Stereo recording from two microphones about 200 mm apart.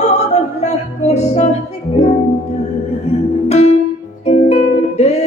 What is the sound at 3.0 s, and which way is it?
Music, 30° left (ahead or behind).